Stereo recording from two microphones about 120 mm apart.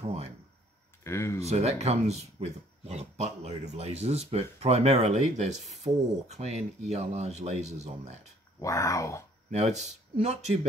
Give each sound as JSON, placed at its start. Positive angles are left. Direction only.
{"t": 0.0, "sound": "a sound", "side_deg": -60}
{"t": 1.0, "sound": "speech", "side_deg": 20}
{"t": 1.4, "sound": "speech", "side_deg": -65}
{"t": 8.5, "sound": "speech", "side_deg": 25}
{"t": 9.5, "sound": "speech", "side_deg": -70}